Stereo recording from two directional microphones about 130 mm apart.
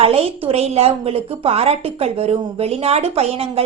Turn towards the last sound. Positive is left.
turn(degrees=-50)  # may be behind; listen again after turning